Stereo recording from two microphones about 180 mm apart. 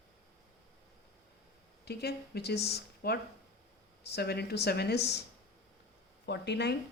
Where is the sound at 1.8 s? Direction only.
65° left (ahead or behind).